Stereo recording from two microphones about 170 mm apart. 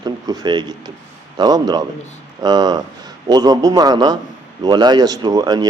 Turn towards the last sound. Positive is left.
turn(degrees=-25)  # may be behind; listen again after turning